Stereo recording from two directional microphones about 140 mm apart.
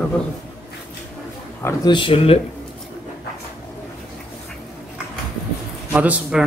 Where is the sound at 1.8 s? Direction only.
35° left (ahead or behind).